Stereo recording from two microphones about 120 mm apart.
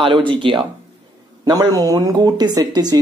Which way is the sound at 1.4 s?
30° right (ahead or behind).